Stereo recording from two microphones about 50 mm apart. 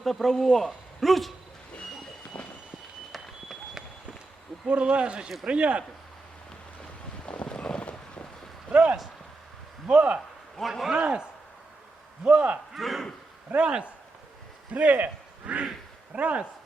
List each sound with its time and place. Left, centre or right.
0.0 s a woman's voice: centre
2.3 s train: left
4.6 s speech: right
7.3 s boat: left
8.7 s speech: right
10.6 s a man's voice: centre
10.9 s speech: right
12.2 s speech: right
12.7 s a man's voice: centre
13.6 s speech: centre